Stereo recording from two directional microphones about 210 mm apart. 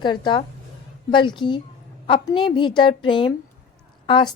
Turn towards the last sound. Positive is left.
turn(degrees=25)  # may be behind; listen again after turning